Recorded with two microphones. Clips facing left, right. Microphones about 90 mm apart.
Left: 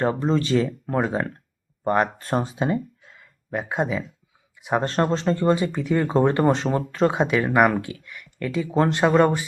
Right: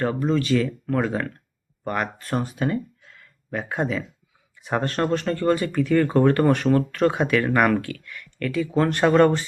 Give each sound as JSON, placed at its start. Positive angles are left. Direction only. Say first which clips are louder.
{"t": 0.0, "sound": "speech", "louder": "left 1 dB", "side_deg": 25}
{"t": 4.9, "sound": "speech", "louder": "even", "side_deg": 25}